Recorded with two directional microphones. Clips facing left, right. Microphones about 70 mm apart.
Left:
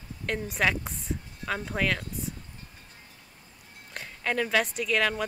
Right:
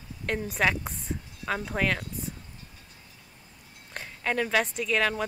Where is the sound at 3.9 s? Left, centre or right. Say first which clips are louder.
Even; centre.